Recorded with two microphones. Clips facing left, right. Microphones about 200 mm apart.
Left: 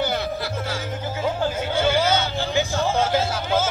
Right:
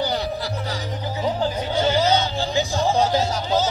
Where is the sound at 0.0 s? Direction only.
15° right (ahead or behind).